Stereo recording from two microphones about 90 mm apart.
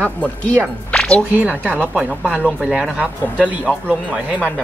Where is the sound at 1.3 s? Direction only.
15° right (ahead or behind).